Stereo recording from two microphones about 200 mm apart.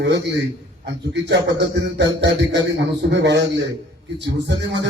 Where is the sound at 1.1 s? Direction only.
60° right (ahead or behind).